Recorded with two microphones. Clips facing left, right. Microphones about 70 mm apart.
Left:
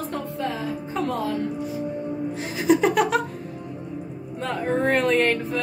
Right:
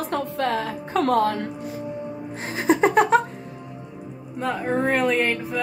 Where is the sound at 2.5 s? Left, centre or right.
Right.